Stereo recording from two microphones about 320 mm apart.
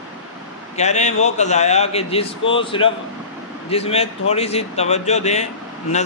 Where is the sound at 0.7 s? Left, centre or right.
Left.